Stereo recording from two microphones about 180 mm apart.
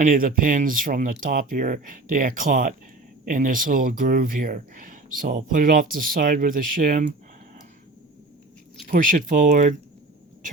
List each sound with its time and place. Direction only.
0.0 s speech: 50° right (ahead or behind)
8.9 s speech: 50° right (ahead or behind)